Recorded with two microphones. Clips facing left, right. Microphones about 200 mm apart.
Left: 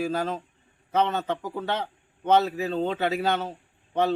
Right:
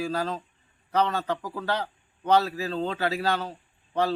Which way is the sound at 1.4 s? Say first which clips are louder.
Even; 20° left (ahead or behind).